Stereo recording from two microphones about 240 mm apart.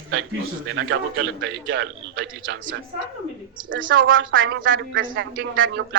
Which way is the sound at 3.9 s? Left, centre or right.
Right.